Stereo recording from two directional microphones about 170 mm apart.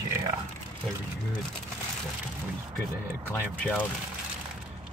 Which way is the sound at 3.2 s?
10° left (ahead or behind).